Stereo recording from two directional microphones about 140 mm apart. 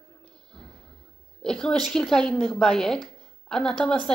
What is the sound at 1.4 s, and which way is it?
A woman's voice, 5° left (ahead or behind).